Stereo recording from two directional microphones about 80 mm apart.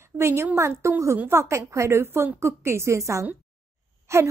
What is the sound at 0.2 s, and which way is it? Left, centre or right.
A woman's voice, right.